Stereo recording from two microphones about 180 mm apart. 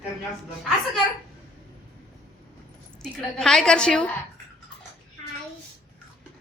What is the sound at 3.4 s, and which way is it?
Speech, 5° left (ahead or behind).